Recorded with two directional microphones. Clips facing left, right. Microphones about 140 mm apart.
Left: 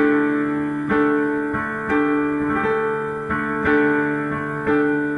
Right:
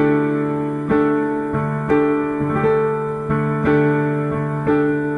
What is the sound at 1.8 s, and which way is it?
Music, 35° right (ahead or behind).